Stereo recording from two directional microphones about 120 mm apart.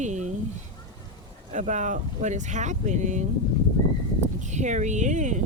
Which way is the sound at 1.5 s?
90° right.